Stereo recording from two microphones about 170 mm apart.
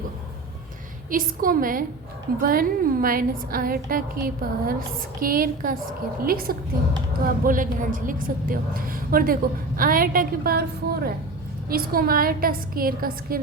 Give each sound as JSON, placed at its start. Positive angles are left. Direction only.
{"t": 1.1, "sound": "a woman's voice", "side_deg": -55}
{"t": 11.7, "sound": "a woman's voice", "side_deg": -60}